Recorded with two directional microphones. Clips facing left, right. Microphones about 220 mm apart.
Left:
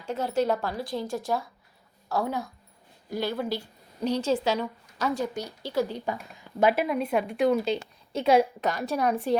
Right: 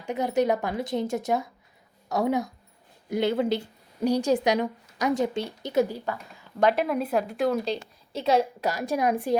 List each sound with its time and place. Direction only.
0.0 s a woman's voice: 15° right (ahead or behind)
6.6 s a woman's voice: 5° left (ahead or behind); by 9.4 s 10° right (ahead or behind)